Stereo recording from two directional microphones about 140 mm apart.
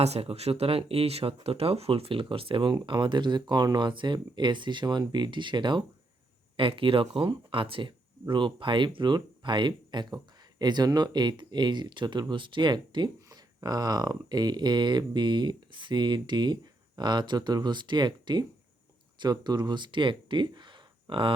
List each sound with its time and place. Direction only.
0.0 s speech: 45° right (ahead or behind)